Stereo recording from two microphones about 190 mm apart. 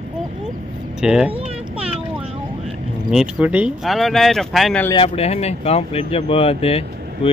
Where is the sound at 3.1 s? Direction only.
5° right (ahead or behind).